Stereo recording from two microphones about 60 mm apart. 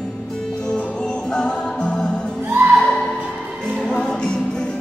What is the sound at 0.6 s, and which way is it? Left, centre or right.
Music, centre.